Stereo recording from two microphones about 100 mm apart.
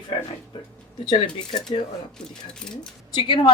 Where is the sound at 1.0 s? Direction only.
50° left (ahead or behind).